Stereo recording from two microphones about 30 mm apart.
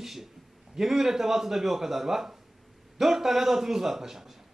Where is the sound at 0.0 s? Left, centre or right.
Centre.